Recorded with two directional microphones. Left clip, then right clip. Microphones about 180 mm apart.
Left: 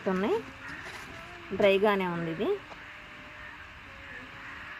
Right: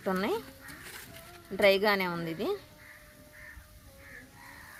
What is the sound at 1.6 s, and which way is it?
Speech, 45° right (ahead or behind).